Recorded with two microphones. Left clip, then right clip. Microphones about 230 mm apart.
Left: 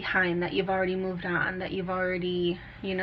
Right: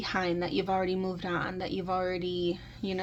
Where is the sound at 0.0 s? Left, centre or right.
Right.